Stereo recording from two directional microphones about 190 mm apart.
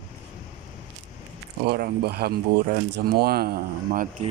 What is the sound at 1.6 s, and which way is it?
Speech, 55° right (ahead or behind).